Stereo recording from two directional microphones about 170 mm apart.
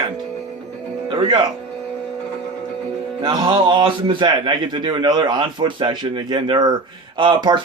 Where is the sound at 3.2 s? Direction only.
25° right (ahead or behind).